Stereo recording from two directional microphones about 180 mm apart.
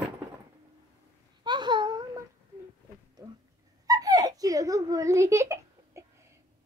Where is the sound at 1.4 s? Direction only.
25° right (ahead or behind).